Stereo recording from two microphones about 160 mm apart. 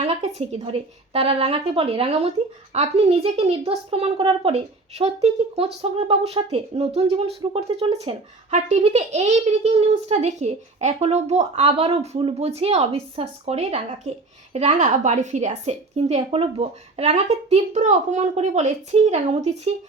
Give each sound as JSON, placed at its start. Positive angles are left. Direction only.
{"t": 0.0, "sound": "a child's voice", "side_deg": -45}